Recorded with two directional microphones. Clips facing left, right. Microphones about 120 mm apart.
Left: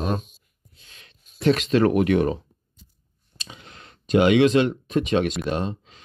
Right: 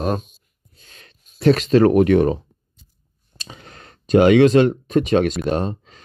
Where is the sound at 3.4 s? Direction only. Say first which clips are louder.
Right 3 dB; 40° right (ahead or behind).